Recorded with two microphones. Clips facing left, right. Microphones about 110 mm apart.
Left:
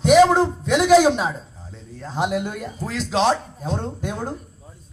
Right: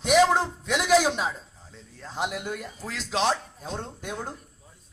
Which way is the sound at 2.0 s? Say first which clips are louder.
Left 7 dB; 30° left (ahead or behind).